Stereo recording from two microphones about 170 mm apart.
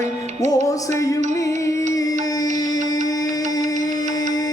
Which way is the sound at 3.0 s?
20° left (ahead or behind).